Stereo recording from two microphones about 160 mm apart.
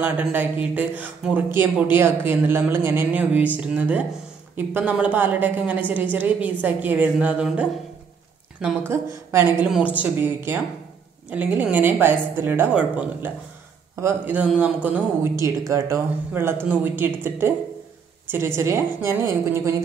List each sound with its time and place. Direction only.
0.0 s a woman's voice: 10° right (ahead or behind)